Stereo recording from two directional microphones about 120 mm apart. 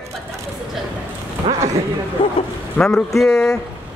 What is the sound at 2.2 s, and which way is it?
Speech, 45° left (ahead or behind).